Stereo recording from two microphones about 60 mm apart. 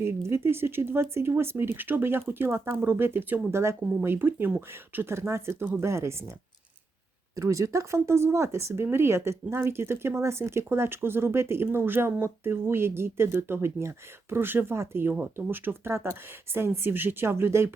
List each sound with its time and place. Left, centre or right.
0.0 s speech: right
3.5 s speech: right
7.3 s speech: right
17.2 s speech: right